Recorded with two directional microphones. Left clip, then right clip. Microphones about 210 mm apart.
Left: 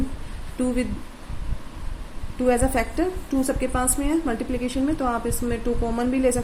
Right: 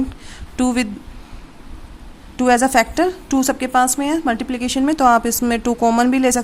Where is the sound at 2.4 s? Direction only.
45° right (ahead or behind).